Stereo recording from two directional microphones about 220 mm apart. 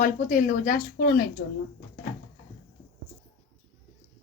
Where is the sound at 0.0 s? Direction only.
40° left (ahead or behind).